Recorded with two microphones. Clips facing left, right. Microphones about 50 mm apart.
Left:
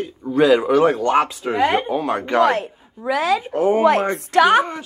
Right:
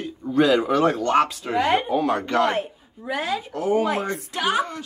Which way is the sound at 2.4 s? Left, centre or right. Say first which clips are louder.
Left 5 dB; left.